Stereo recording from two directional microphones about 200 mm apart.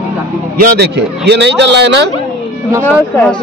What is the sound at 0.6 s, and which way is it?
A man's voice, 55° right (ahead or behind).